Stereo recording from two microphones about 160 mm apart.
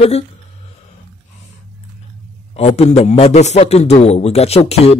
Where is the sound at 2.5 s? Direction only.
40° left (ahead or behind).